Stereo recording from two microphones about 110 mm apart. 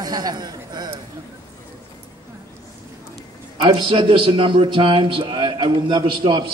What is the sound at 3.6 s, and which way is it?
A man's voice, 55° right (ahead or behind).